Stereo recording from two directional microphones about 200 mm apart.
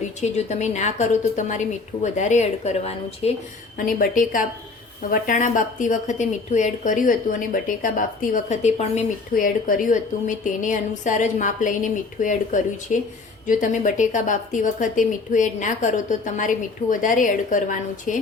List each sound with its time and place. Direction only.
0.2 s a woman's voice: 35° left (ahead or behind)
3.8 s a woman's voice: 45° left (ahead or behind)